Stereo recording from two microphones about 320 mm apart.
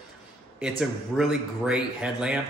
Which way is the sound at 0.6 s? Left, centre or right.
Centre.